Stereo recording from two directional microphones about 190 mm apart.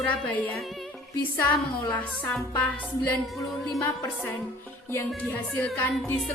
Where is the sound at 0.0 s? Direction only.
10° left (ahead or behind).